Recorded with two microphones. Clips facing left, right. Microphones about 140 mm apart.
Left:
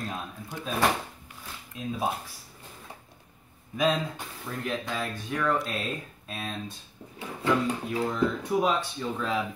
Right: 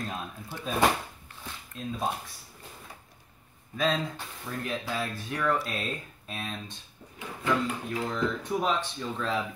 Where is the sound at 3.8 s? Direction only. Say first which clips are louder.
Left 2 dB; 10° left (ahead or behind).